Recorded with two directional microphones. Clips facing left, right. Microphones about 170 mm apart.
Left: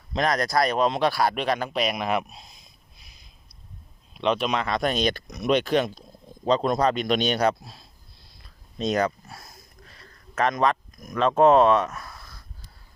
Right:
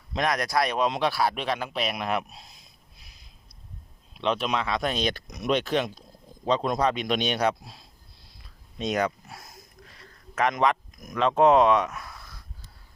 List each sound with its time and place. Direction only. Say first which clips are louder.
0.1 s speech: left 2 dB; 10° right (ahead or behind)
4.2 s speech: left 2 dB; centre (ahead or behind)
8.8 s speech: left 2 dB; 10° right (ahead or behind)